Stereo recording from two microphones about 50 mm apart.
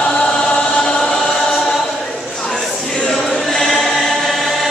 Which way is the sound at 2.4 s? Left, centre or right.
Centre.